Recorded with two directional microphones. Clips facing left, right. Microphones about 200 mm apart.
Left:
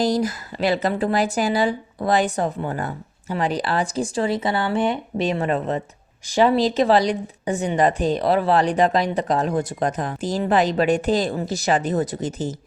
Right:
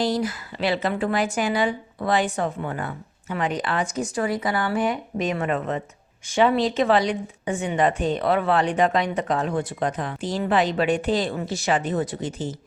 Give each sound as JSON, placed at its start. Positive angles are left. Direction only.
{"t": 0.0, "sound": "speech", "side_deg": 40}